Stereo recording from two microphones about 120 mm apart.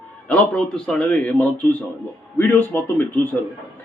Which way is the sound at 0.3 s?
10° left (ahead or behind).